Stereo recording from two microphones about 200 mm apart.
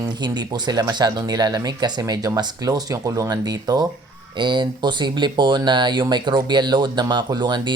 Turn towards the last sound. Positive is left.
turn(degrees=-20)  # may be behind; listen again after turning